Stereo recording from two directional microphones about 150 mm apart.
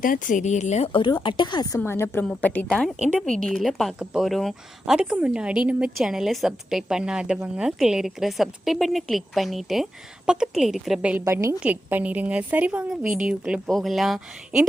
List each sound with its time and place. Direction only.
0.0 s speech: 60° left (ahead or behind)
1.2 s a woman's voice: 30° left (ahead or behind); by 14.2 s centre (ahead or behind)